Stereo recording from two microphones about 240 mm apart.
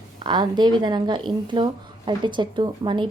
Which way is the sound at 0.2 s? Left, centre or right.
Centre.